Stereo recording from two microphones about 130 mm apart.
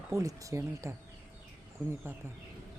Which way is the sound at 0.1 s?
25° right (ahead or behind).